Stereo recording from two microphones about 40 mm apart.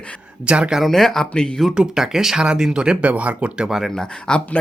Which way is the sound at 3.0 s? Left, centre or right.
Right.